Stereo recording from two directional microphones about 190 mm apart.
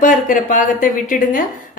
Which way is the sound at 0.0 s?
45° left (ahead or behind).